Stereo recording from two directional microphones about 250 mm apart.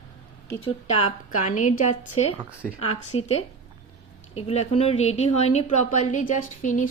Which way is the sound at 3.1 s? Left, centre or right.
Left.